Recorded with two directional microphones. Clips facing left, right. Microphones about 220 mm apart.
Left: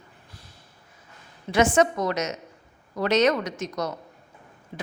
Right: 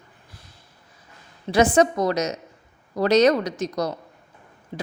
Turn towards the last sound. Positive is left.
turn(degrees=-30)  # may be behind; listen again after turning